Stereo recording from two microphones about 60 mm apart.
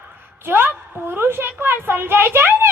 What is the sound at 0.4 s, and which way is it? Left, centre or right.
A woman's voice, right.